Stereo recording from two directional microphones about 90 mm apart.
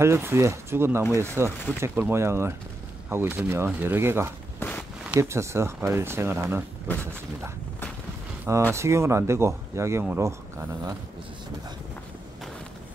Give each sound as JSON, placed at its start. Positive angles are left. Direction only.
{"t": 0.0, "sound": "speech", "side_deg": -30}
{"t": 4.6, "sound": "walk", "side_deg": 20}
{"t": 5.1, "sound": "speech", "side_deg": -25}
{"t": 8.7, "sound": "speech", "side_deg": -30}